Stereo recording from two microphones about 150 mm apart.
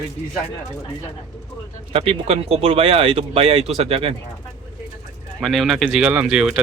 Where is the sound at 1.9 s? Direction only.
40° right (ahead or behind).